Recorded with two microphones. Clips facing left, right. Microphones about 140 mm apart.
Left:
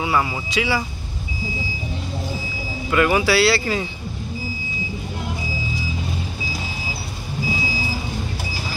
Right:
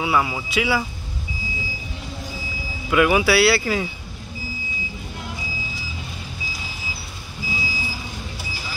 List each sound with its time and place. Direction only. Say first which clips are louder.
0.0 s speech: even; 5° right (ahead or behind)
2.9 s speech: right 1 dB; 10° right (ahead or behind)